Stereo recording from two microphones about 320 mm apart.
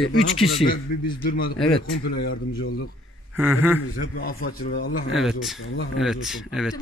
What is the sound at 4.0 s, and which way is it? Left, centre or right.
Speech, left.